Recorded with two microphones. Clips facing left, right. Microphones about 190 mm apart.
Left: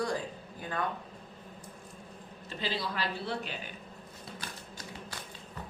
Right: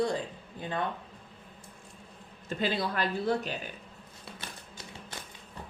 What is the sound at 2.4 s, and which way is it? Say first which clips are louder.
Speech: right 5 dB; 50° right (ahead or behind).